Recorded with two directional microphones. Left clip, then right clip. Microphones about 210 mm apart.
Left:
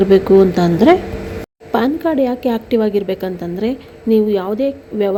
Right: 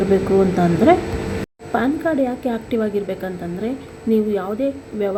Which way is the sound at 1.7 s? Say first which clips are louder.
Left 3 dB; 30° left (ahead or behind).